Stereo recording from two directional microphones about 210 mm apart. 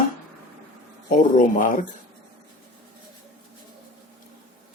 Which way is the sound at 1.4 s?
40° left (ahead or behind).